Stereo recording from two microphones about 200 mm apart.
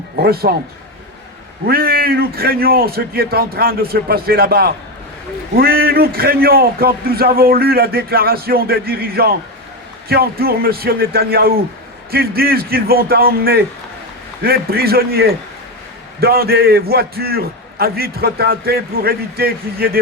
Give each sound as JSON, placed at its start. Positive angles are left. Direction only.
{"t": 0.2, "sound": "a man's voice", "side_deg": -50}
{"t": 1.6, "sound": "a man's voice", "side_deg": -50}